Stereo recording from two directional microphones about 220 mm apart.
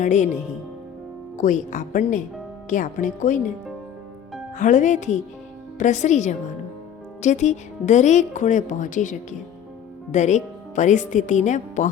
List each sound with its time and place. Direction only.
0.0 s speech: 35° left (ahead or behind)
1.4 s speech: 35° left (ahead or behind)
4.5 s speech: 35° left (ahead or behind)